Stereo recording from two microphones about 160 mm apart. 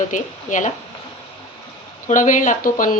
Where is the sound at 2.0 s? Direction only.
55° left (ahead or behind).